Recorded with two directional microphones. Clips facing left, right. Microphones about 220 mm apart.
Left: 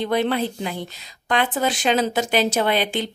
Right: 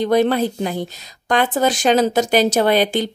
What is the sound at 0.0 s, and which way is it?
Speech, 40° right (ahead or behind).